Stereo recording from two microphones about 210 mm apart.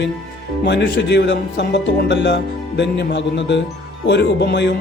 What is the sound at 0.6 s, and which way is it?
Speech, 55° left (ahead or behind).